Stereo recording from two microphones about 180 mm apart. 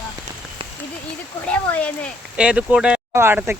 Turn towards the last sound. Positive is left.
turn(degrees=-15)  # may be behind; listen again after turning